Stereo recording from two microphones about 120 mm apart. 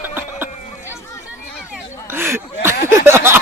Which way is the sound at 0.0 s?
15° right (ahead or behind).